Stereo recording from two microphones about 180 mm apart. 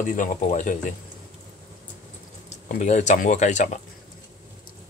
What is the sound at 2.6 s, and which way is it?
Speech, 45° left (ahead or behind).